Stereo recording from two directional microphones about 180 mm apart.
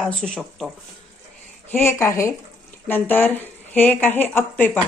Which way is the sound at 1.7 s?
10° left (ahead or behind).